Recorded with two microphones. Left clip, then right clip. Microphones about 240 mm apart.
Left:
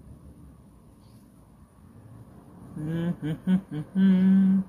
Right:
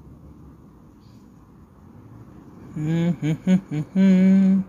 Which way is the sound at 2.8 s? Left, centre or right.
Right.